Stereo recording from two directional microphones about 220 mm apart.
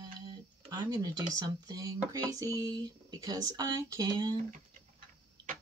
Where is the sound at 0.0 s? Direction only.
20° right (ahead or behind).